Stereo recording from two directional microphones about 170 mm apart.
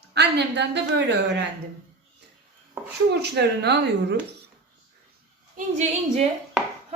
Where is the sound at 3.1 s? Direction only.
75° right (ahead or behind).